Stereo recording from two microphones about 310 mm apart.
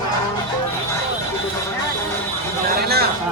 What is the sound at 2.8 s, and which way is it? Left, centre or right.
Speech, right.